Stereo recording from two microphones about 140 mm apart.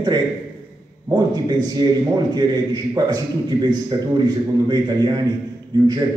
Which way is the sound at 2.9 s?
30° right (ahead or behind).